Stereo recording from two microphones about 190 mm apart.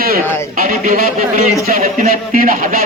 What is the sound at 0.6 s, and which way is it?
Speech, 45° right (ahead or behind).